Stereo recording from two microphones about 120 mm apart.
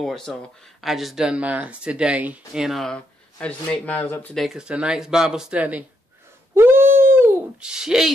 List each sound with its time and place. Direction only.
0.0 s speech: 5° left (ahead or behind)
4.4 s speech: 5° right (ahead or behind)
6.5 s dog: 20° right (ahead or behind)
7.6 s speech: 5° right (ahead or behind)